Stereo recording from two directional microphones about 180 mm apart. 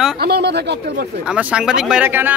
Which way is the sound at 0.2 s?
65° right (ahead or behind).